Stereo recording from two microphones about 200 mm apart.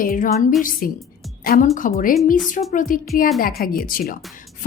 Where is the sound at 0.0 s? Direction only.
40° left (ahead or behind).